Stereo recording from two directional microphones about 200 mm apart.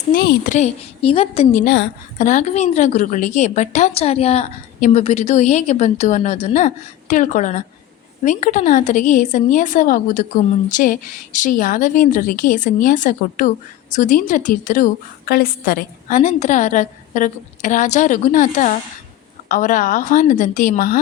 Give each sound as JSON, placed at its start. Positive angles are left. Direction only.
{"t": 0.1, "sound": "a woman's voice", "side_deg": 45}
{"t": 1.6, "sound": "a woman's voice", "side_deg": 60}
{"t": 2.1, "sound": "a woman's voice", "side_deg": 35}